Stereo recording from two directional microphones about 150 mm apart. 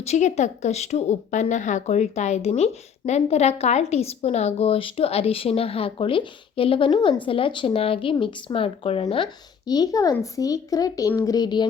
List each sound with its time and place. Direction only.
0.0 s a woman's voice: 50° left (ahead or behind); by 11.7 s 30° left (ahead or behind)